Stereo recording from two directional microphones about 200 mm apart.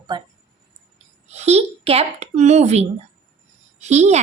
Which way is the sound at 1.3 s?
35° right (ahead or behind).